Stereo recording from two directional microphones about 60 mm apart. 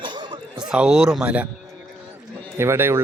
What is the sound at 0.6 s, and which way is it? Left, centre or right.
Speech, centre.